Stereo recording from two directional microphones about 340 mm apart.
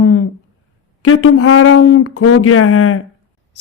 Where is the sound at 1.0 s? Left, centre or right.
Left.